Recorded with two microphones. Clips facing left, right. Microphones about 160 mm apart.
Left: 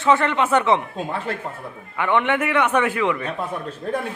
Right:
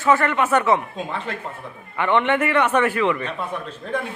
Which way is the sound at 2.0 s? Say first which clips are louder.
Right 1 dB; 10° left (ahead or behind).